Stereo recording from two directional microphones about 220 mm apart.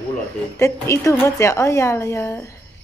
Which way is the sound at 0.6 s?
15° left (ahead or behind).